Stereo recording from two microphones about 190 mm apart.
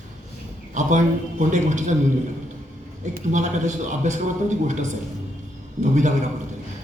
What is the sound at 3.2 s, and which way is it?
A man's voice, 40° right (ahead or behind).